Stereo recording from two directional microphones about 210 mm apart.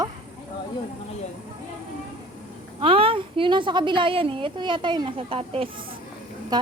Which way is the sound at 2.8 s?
25° right (ahead or behind).